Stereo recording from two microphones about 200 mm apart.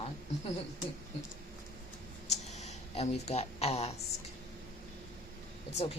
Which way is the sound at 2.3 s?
35° left (ahead or behind).